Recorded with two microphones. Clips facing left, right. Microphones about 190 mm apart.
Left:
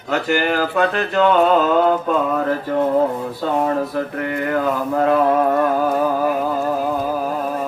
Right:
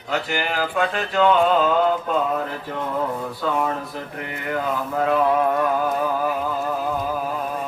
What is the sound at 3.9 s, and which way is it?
Mantra, 50° left (ahead or behind).